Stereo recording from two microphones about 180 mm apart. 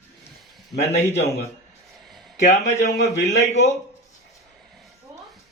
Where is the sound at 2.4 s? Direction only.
40° left (ahead or behind).